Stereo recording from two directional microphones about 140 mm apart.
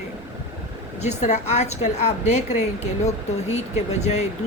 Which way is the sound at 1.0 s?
55° left (ahead or behind).